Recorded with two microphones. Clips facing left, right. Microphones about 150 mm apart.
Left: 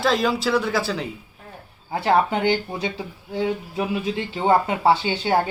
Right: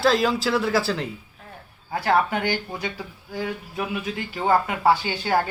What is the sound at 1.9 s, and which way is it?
Speech, 25° left (ahead or behind).